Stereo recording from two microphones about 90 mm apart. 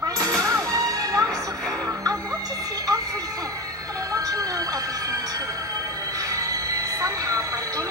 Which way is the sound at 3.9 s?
40° right (ahead or behind).